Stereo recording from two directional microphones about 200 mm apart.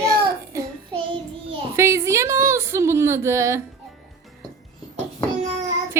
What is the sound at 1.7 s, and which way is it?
Speech, 15° right (ahead or behind).